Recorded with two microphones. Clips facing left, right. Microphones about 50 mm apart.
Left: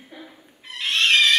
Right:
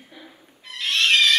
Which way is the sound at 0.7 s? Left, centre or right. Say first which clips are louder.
Left 1 dB; left.